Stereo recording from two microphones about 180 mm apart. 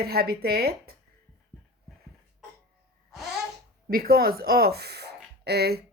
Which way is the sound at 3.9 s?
55° right (ahead or behind).